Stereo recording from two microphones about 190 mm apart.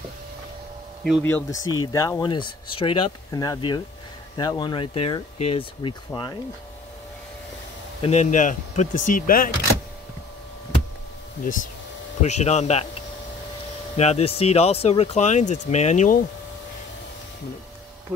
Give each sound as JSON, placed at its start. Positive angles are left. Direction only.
{"t": 1.2, "sound": "speech", "side_deg": 15}
{"t": 8.0, "sound": "speech", "side_deg": 35}
{"t": 12.2, "sound": "speech", "side_deg": 35}
{"t": 13.9, "sound": "speech", "side_deg": 35}